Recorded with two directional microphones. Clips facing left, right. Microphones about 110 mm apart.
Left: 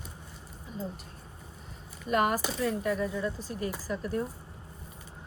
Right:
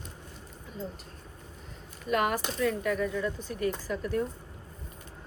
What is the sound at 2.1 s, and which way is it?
Speech, 40° left (ahead or behind).